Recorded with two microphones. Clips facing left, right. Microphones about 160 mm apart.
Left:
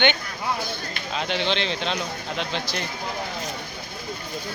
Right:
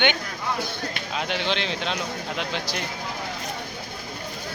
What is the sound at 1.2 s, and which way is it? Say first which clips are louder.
Speech: left 2 dB; 5° right (ahead or behind).